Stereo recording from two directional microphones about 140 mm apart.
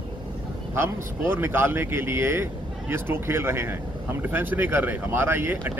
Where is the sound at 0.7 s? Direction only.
15° right (ahead or behind).